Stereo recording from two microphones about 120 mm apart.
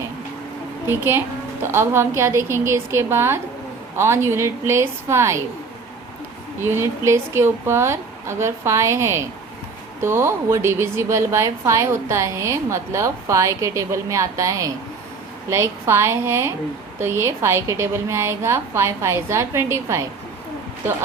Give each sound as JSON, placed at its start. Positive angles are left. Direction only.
{"t": 0.9, "sound": "a woman's voice", "side_deg": -20}
{"t": 6.6, "sound": "a woman's voice", "side_deg": -20}